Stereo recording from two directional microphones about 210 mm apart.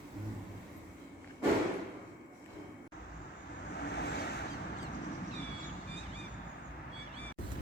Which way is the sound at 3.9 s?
50° left (ahead or behind).